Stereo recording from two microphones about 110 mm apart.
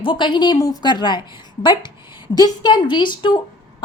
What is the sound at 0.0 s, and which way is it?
A woman's voice, 45° left (ahead or behind).